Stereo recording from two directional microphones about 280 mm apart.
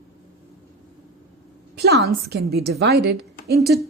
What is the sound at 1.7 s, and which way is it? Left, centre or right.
A woman's voice, right.